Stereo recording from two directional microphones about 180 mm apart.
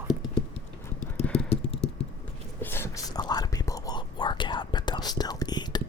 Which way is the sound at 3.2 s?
20° left (ahead or behind).